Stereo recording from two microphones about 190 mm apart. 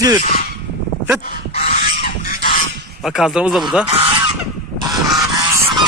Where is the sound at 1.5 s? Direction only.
35° left (ahead or behind).